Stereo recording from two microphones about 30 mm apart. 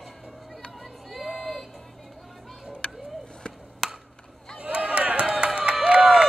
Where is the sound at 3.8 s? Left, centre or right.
Centre.